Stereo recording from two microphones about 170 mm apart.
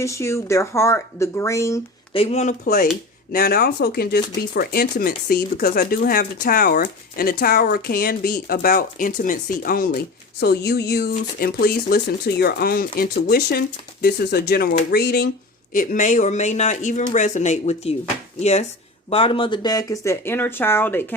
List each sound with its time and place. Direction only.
0.0 s speech: 15° left (ahead or behind)
2.1 s speech: 35° left (ahead or behind)
2.6 s speech: 55° left (ahead or behind)
10.4 s speech: 70° left (ahead or behind)
15.7 s speech: 50° left (ahead or behind); by 21.2 s 10° left (ahead or behind)